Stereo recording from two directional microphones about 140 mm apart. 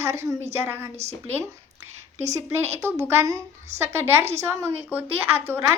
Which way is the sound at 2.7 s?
20° right (ahead or behind).